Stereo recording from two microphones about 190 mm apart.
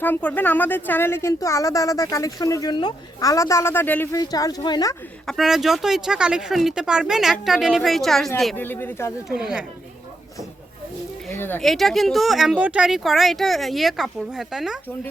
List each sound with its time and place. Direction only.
0.0 s a woman's voice: 10° left (ahead or behind)
5.2 s a woman's voice: centre (ahead or behind)
9.3 s speech: 5° right (ahead or behind)
11.3 s speech: 10° left (ahead or behind)